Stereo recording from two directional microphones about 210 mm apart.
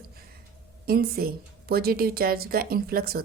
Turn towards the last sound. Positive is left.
turn(degrees=-45)  # may be behind; listen again after turning